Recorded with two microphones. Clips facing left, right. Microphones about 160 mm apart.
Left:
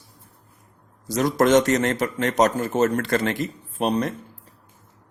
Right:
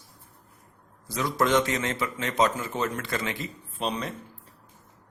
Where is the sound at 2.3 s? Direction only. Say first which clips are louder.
Left 4 dB; 50° left (ahead or behind).